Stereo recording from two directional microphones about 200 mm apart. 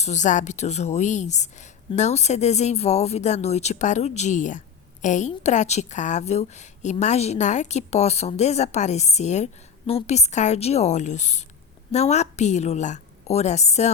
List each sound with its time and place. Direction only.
0.0 s a woman's voice: 35° left (ahead or behind)